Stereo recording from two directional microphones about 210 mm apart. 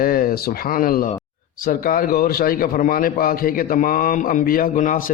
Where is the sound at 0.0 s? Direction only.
45° left (ahead or behind).